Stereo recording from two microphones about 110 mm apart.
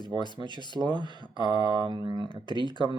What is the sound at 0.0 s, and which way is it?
Speech, 40° left (ahead or behind).